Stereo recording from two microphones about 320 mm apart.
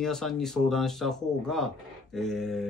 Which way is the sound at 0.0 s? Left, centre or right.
Centre.